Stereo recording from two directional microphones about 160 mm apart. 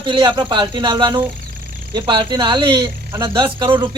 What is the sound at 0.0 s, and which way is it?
Speech, 30° right (ahead or behind).